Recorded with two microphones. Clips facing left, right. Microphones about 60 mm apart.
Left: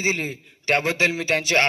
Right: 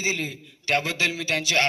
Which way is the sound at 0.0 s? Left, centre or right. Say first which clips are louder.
Left 3 dB; left.